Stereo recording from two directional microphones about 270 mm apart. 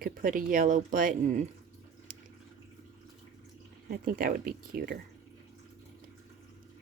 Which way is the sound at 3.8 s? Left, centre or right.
Right.